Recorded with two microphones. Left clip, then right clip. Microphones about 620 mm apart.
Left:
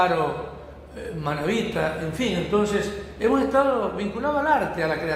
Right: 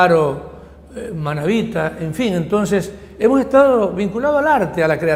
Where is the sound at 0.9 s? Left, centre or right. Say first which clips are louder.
Right 4 dB; right.